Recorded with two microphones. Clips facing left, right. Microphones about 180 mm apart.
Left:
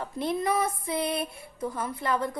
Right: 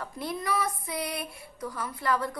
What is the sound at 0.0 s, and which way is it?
Speech, 25° left (ahead or behind).